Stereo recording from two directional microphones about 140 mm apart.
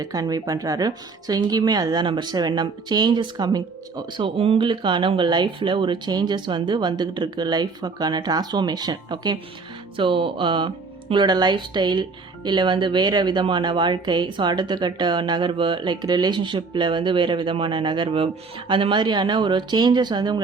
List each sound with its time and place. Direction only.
0.0 s speech: 25° right (ahead or behind)